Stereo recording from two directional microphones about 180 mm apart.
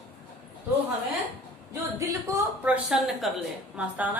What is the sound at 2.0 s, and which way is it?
A woman's voice, 10° right (ahead or behind).